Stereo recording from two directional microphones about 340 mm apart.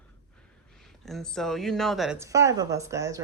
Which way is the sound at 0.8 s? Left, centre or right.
Centre.